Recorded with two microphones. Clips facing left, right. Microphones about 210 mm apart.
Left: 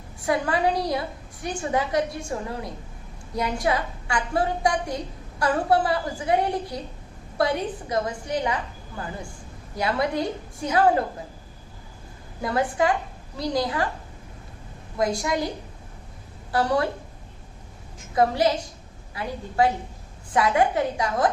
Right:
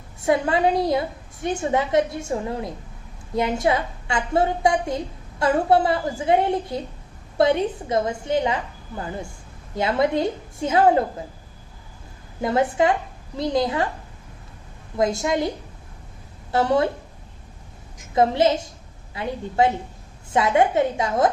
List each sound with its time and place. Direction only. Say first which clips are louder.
0.2 s a woman's voice: right 4 dB; 25° right (ahead or behind)
9.7 s a woman's voice: right 4 dB; 25° right (ahead or behind)
12.4 s a woman's voice: right 3 dB; 25° right (ahead or behind)
14.9 s a woman's voice: right 3 dB; 25° right (ahead or behind)
16.5 s a woman's voice: right 3 dB; 25° right (ahead or behind)
18.1 s a woman's voice: right 3 dB; 25° right (ahead or behind)